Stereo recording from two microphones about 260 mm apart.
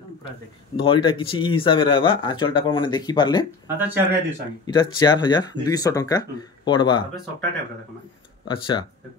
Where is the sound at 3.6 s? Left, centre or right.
Centre.